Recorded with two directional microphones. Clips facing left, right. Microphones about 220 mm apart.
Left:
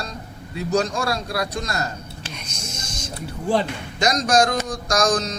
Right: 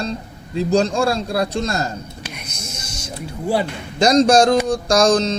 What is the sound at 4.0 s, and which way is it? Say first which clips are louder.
A man's voice: right 7 dB; 30° right (ahead or behind).